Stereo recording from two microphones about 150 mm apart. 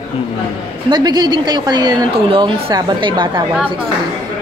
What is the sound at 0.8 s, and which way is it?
A woman's voice, 30° right (ahead or behind).